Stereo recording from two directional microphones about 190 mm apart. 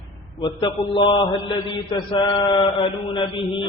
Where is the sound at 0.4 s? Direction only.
25° left (ahead or behind).